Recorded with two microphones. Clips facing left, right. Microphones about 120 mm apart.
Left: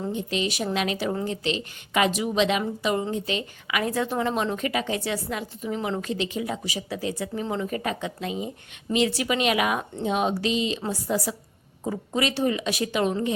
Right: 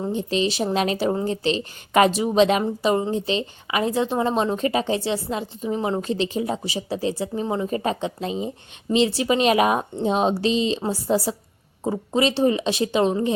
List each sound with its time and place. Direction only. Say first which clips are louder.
0.1 s a woman's voice: right 5 dB; 35° right (ahead or behind)